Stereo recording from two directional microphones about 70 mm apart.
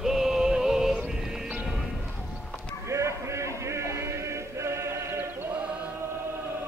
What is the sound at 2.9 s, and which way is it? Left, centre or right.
Music, right.